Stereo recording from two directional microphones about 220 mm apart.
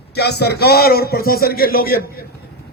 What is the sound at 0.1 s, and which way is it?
A man's voice, 50° left (ahead or behind).